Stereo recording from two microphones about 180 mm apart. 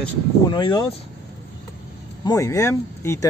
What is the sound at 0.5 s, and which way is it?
Speech, 25° left (ahead or behind).